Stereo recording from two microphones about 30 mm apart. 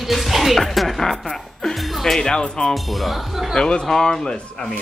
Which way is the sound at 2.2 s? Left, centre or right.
Left.